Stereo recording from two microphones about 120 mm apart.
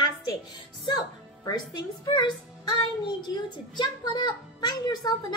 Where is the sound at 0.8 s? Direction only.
35° left (ahead or behind).